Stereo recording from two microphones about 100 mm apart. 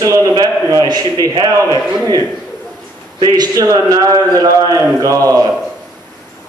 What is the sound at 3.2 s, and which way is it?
A man's voice, 40° right (ahead or behind).